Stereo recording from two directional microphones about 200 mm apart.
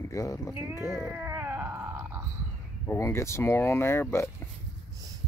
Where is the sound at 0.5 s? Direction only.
15° right (ahead or behind).